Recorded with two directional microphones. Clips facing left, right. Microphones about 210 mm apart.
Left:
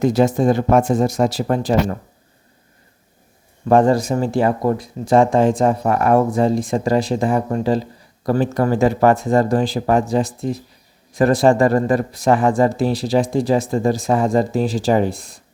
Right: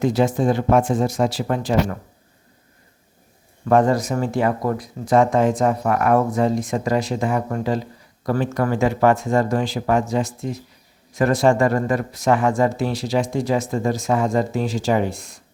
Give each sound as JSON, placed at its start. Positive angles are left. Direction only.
{"t": 0.0, "sound": "speech", "side_deg": 40}
{"t": 3.7, "sound": "speech", "side_deg": 30}